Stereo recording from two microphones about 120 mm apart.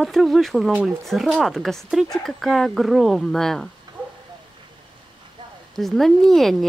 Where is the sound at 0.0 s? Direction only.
Centre (ahead or behind).